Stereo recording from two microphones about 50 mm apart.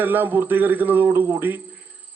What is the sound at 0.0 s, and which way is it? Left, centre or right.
A man's voice, right.